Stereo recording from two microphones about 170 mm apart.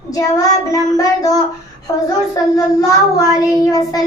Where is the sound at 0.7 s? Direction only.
20° left (ahead or behind).